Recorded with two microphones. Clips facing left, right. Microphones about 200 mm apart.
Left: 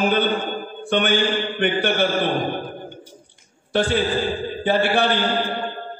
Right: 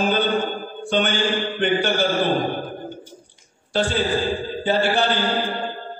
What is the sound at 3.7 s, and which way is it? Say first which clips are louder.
Mantra: left 1 dB; 60° left (ahead or behind).